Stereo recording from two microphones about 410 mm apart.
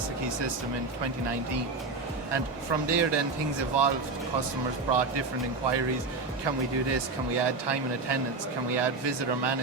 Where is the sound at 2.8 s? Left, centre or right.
Right.